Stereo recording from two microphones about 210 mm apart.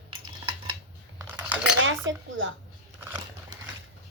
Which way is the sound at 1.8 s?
65° right (ahead or behind).